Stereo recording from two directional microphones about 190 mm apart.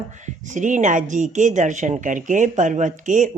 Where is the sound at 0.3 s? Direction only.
40° right (ahead or behind).